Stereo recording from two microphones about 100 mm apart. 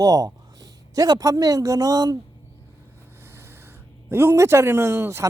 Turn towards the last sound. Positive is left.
turn(degrees=-25)  # may be behind; listen again after turning